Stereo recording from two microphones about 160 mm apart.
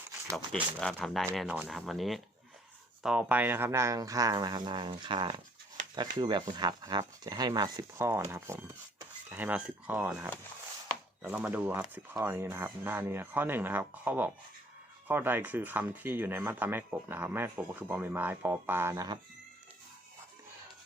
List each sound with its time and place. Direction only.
0.5 s speech: 5° left (ahead or behind); by 19.2 s 25° right (ahead or behind)